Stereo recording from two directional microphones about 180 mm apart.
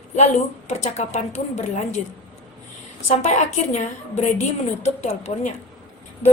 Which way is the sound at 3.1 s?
35° left (ahead or behind).